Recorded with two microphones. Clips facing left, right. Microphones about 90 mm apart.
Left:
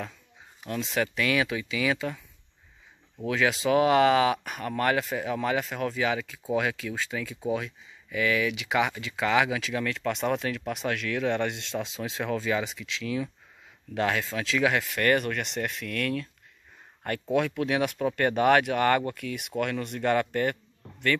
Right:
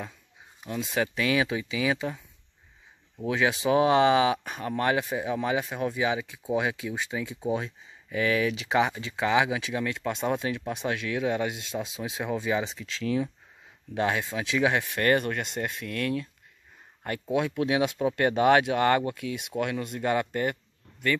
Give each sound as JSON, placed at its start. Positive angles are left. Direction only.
{"t": 0.7, "sound": "speech", "side_deg": -20}
{"t": 3.3, "sound": "speech", "side_deg": -20}
{"t": 13.9, "sound": "speech", "side_deg": -20}